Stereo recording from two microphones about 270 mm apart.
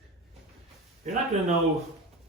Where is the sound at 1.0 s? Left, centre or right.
Right.